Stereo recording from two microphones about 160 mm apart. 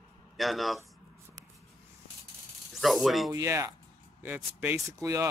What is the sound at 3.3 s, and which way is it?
Speech, 20° right (ahead or behind).